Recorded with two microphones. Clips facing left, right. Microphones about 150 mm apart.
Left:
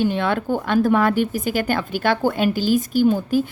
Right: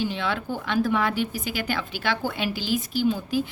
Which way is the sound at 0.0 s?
50° left (ahead or behind).